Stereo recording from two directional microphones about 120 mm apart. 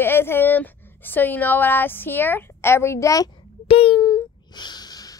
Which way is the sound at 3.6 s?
55° left (ahead or behind).